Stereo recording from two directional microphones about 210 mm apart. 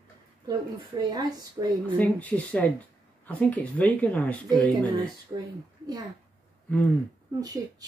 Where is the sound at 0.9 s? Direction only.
20° right (ahead or behind).